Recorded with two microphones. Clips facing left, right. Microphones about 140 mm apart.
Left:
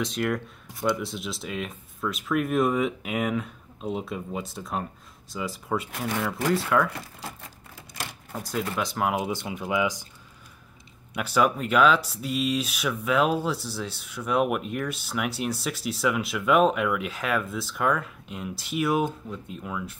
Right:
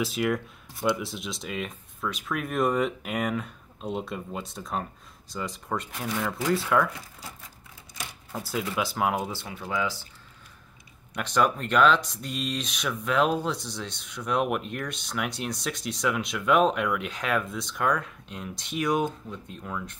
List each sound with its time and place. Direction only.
0.0 s speech: 5° right (ahead or behind)
6.9 s speech: 65° left (ahead or behind)
8.3 s speech: centre (ahead or behind)
9.1 s speech: 15° left (ahead or behind)
11.1 s speech: 5° left (ahead or behind)